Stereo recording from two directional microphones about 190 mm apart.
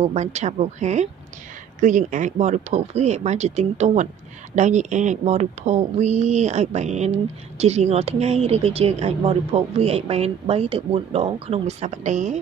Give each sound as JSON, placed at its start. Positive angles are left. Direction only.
{"t": 0.0, "sound": "speech", "side_deg": -35}